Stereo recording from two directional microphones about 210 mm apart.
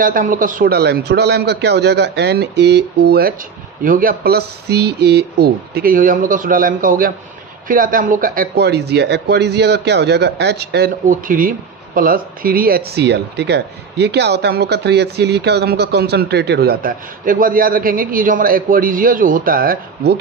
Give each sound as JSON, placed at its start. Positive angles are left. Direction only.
{"t": 0.0, "sound": "speech", "side_deg": -40}